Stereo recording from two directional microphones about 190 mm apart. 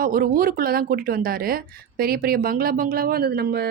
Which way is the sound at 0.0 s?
50° right (ahead or behind).